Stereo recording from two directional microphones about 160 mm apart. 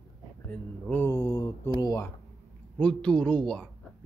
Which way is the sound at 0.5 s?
10° left (ahead or behind).